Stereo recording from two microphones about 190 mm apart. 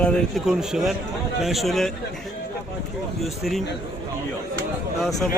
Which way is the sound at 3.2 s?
Centre (ahead or behind).